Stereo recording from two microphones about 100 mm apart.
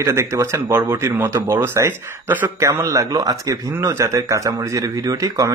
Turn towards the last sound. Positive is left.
turn(degrees=-35)  # may be behind; listen again after turning